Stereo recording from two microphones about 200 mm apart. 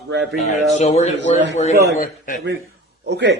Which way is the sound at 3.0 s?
60° right (ahead or behind).